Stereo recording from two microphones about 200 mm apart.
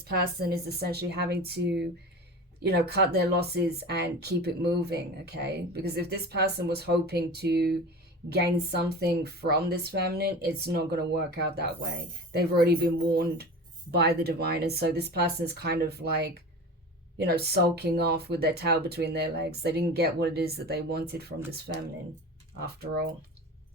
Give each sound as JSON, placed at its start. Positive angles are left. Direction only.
{"t": 0.0, "sound": "speech", "side_deg": -50}